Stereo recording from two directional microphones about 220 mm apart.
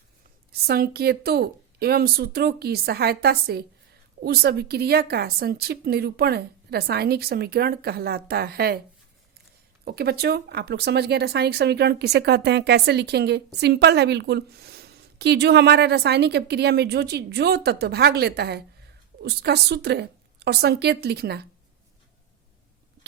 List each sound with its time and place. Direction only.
0.5 s speech: 45° right (ahead or behind)
9.8 s speech: 45° right (ahead or behind)